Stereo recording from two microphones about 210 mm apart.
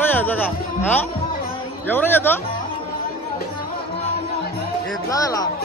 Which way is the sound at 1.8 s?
10° left (ahead or behind).